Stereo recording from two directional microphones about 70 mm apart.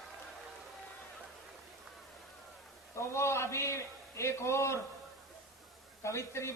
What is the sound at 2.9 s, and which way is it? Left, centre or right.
A man's voice, left.